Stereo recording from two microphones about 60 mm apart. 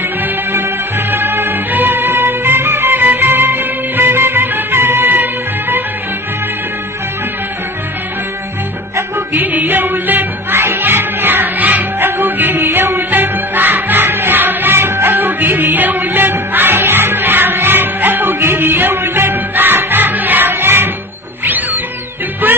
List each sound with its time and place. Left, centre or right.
0.5 s music: right
9.3 s music: right
22.4 s music: right